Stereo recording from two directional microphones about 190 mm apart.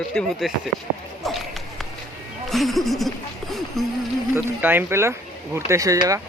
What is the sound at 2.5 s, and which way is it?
Music, centre (ahead or behind).